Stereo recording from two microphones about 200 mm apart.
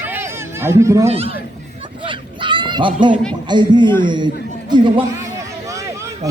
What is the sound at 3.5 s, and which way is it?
Speech, 20° right (ahead or behind).